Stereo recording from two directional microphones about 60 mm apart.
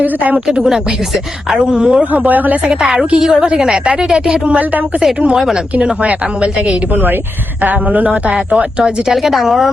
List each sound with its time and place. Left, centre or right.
0.0 s a man's voice: right
0.5 s a woman's voice: centre
2.2 s a man's voice: right
2.8 s a woman's voice: centre
5.8 s a man's voice: right
8.8 s a woman's voice: centre